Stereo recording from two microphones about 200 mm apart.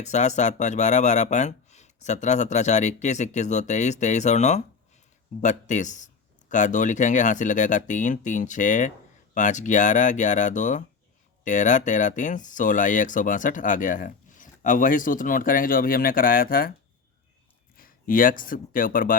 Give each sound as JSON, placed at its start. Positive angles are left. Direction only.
{"t": 0.0, "sound": "speech", "side_deg": 35}
{"t": 17.7, "sound": "speech", "side_deg": 45}